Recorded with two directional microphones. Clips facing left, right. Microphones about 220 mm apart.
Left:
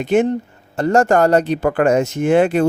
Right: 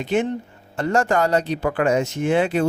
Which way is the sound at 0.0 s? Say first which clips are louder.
Left 6 dB; 45° left (ahead or behind).